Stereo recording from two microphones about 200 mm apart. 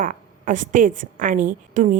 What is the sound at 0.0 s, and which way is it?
A woman's voice, 40° right (ahead or behind).